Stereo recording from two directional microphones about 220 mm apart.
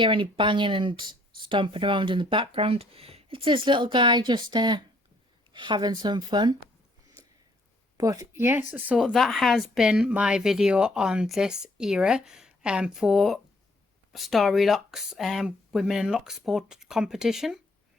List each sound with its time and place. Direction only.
0.0 s speech: 20° right (ahead or behind)
7.9 s speech: 15° right (ahead or behind)